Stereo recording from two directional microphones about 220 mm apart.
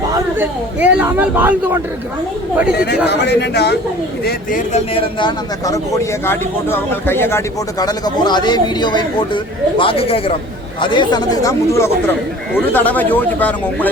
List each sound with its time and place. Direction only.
0.1 s speech: 10° right (ahead or behind)
2.7 s speech: 50° left (ahead or behind)
4.3 s speech: 35° left (ahead or behind)
4.9 s a man's voice: 20° left (ahead or behind)